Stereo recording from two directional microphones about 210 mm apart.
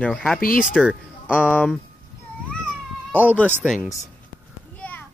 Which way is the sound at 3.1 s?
10° right (ahead or behind).